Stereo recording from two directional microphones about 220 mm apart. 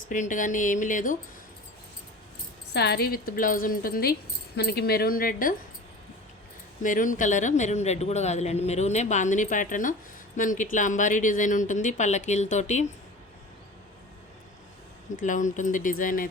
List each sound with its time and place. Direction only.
0.1 s speech: 35° left (ahead or behind)
2.7 s speech: 45° left (ahead or behind)
6.8 s speech: 35° left (ahead or behind)
15.1 s speech: 35° left (ahead or behind)